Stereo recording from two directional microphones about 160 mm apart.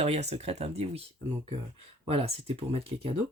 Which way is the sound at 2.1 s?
40° right (ahead or behind).